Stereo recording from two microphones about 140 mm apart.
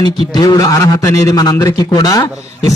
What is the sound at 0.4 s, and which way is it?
A man's voice, 25° left (ahead or behind).